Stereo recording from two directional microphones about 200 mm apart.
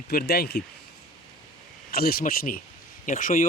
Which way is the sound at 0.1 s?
50° left (ahead or behind).